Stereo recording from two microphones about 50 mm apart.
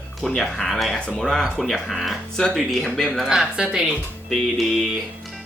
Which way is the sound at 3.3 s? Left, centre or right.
Centre.